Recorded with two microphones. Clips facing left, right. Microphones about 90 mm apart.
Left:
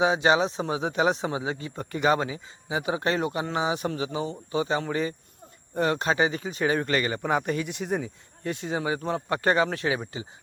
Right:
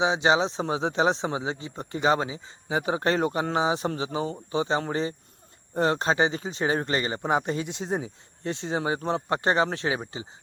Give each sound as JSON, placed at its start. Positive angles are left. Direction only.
{"t": 0.0, "sound": "speech", "side_deg": -25}